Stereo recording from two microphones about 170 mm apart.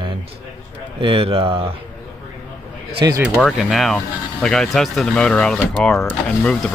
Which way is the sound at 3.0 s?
20° right (ahead or behind).